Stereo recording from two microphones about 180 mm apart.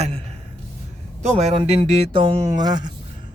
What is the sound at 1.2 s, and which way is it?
Speech, 35° right (ahead or behind).